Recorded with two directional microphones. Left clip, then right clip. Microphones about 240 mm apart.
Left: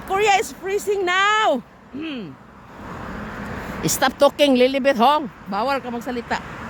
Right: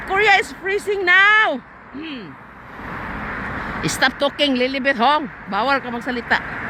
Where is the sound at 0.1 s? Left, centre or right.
Centre.